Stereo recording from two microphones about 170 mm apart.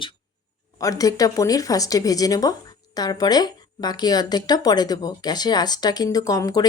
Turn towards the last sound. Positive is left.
turn(degrees=20)  # may be behind; listen again after turning